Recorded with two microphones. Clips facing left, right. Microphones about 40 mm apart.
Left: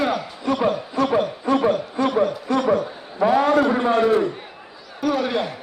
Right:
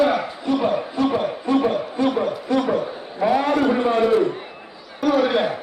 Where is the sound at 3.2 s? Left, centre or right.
Centre.